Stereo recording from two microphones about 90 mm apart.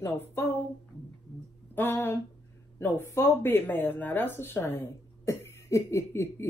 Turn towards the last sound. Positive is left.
turn(degrees=30)  # may be behind; listen again after turning